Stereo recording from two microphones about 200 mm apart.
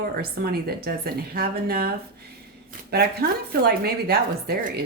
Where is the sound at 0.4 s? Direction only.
50° right (ahead or behind).